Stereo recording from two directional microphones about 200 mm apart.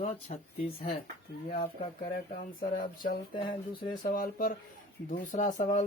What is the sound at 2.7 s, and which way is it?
Speech, 45° left (ahead or behind).